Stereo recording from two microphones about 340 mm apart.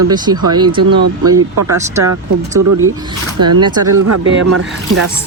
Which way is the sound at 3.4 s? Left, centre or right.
Right.